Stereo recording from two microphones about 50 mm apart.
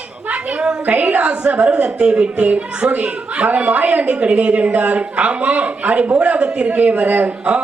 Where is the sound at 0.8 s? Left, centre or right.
Right.